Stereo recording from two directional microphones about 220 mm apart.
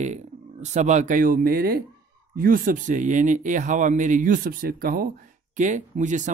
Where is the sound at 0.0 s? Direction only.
30° right (ahead or behind).